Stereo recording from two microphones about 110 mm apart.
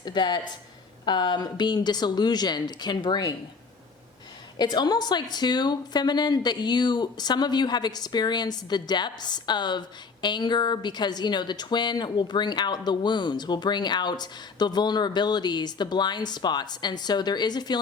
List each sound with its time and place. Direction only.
0.0 s a woman's voice: 45° left (ahead or behind)
4.5 s a woman's voice: 40° left (ahead or behind)